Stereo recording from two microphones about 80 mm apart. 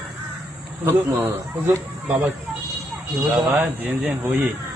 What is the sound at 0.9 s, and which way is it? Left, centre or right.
Speech, right.